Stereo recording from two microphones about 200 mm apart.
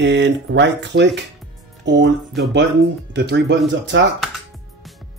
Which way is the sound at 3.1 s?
60° right (ahead or behind).